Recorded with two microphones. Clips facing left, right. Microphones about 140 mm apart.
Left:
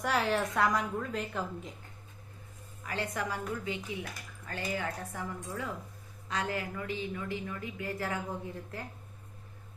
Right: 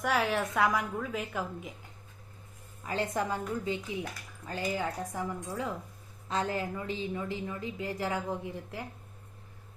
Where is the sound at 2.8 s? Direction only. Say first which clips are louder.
Right 4 dB; 25° right (ahead or behind).